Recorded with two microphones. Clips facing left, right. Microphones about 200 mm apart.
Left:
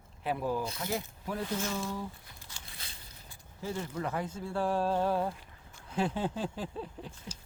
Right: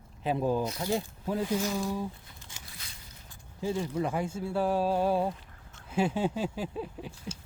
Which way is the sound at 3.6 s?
15° right (ahead or behind).